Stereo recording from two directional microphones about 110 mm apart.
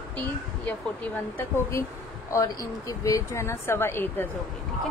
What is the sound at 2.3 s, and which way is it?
Speech, 30° left (ahead or behind).